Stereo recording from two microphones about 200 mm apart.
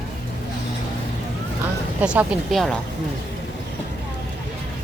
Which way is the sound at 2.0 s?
5° right (ahead or behind).